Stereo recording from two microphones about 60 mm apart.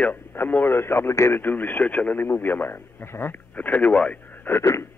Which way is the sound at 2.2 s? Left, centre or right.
Left.